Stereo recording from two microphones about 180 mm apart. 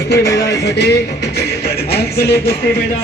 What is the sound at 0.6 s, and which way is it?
Music, 65° left (ahead or behind).